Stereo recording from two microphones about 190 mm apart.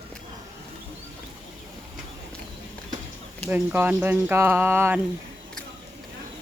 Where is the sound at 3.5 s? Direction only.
10° right (ahead or behind).